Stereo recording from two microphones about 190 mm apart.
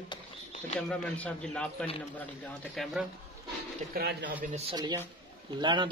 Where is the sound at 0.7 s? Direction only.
5° left (ahead or behind).